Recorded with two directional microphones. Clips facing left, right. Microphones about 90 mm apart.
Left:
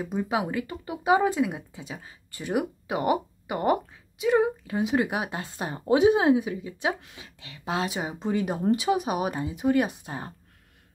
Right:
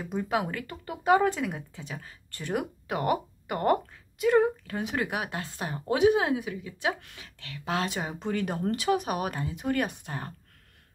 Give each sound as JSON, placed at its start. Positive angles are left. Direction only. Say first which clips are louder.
{"t": 0.0, "sound": "speech", "louder": "left 2 dB", "side_deg": 15}